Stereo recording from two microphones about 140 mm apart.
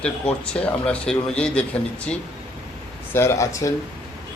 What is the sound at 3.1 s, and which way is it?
Speech, 20° left (ahead or behind).